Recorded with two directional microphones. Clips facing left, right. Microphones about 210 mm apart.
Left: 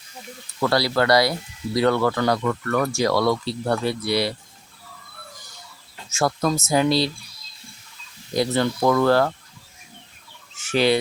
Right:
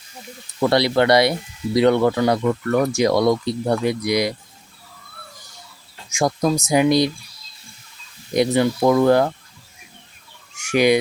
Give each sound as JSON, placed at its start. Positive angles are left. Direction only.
{"t": 0.6, "sound": "speech", "side_deg": -20}
{"t": 6.1, "sound": "speech", "side_deg": -15}
{"t": 8.3, "sound": "speech", "side_deg": -20}
{"t": 10.5, "sound": "fowl", "side_deg": -15}